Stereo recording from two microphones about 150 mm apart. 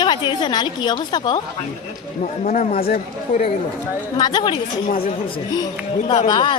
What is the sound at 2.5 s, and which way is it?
Speech, 65° left (ahead or behind).